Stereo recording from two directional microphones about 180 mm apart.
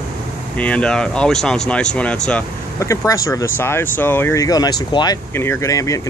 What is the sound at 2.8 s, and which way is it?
Speech, 15° left (ahead or behind).